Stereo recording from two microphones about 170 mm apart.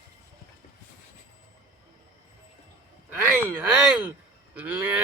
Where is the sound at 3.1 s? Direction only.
10° right (ahead or behind).